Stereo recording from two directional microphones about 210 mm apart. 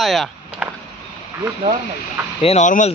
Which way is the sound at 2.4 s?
30° left (ahead or behind).